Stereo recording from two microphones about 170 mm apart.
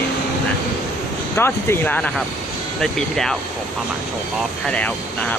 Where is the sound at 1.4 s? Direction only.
15° left (ahead or behind).